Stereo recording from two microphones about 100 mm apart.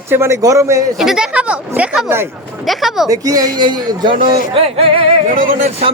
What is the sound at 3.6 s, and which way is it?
Speech, 50° right (ahead or behind).